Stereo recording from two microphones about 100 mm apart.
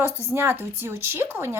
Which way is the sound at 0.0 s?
25° right (ahead or behind).